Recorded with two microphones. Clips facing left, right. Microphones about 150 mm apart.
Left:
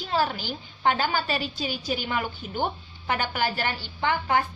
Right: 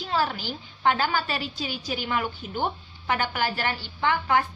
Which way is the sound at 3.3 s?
35° left (ahead or behind).